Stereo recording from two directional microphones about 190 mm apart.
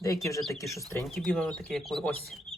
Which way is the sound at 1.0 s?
Centre (ahead or behind).